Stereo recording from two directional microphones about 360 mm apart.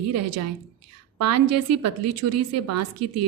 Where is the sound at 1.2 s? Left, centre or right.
Right.